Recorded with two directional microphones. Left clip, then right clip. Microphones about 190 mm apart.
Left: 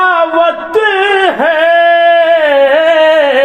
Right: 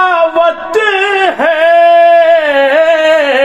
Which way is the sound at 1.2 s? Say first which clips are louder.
Even; 30° right (ahead or behind).